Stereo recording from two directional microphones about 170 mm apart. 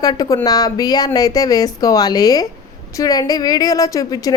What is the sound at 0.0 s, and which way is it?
A woman's voice, 20° left (ahead or behind).